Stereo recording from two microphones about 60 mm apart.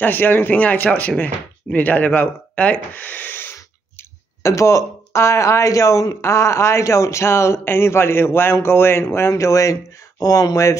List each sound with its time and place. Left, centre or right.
0.0 s speech: left
4.4 s speech: left
9.3 s speech: left